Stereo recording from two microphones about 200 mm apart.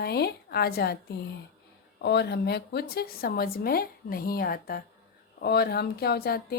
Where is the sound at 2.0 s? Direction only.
55° left (ahead or behind).